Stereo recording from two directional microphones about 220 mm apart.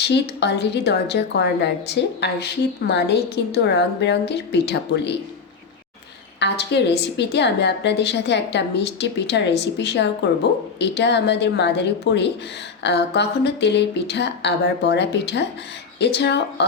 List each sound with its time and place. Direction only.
0.0 s a woman's voice: 50° left (ahead or behind)
6.4 s a woman's voice: 50° left (ahead or behind)